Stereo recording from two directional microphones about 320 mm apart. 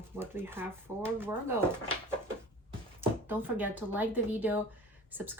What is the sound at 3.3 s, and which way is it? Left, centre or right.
Speech, centre.